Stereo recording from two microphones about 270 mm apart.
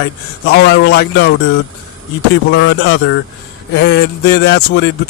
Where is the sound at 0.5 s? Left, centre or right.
Left.